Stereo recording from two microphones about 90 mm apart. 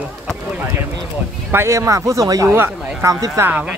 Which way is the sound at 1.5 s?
30° right (ahead or behind).